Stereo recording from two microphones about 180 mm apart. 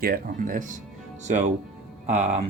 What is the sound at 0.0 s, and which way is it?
Speech, 50° right (ahead or behind).